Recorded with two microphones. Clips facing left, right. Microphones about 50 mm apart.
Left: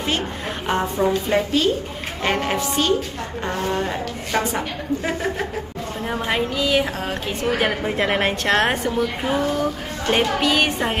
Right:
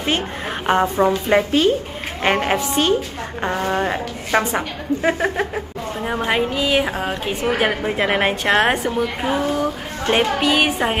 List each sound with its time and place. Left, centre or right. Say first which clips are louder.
0.7 s a woman's voice: right 4 dB; right
6.0 s a woman's voice: right 3 dB; centre